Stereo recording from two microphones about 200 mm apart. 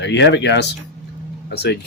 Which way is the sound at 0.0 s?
60° left (ahead or behind).